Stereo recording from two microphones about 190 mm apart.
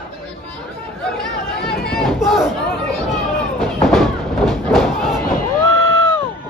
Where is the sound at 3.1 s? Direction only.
Centre (ahead or behind).